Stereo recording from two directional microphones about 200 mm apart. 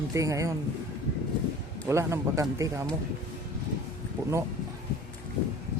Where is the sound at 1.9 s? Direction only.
15° right (ahead or behind).